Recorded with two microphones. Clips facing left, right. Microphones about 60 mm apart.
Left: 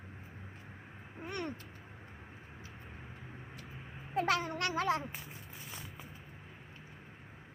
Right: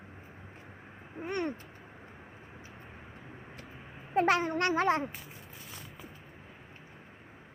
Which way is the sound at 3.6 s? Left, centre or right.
Centre.